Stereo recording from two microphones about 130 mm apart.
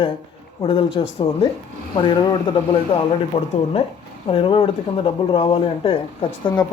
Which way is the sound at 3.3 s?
45° left (ahead or behind).